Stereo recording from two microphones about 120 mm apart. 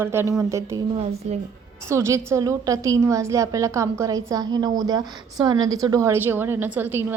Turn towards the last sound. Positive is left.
turn(degrees=-15)  # may be behind; listen again after turning